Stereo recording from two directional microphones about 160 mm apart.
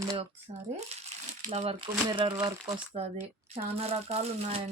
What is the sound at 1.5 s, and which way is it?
Speech, 40° right (ahead or behind).